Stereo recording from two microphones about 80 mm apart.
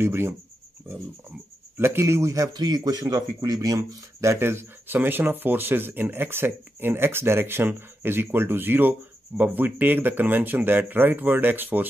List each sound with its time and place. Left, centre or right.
0.0 s a man's voice: right
1.8 s a man's voice: right
2.5 s speech: right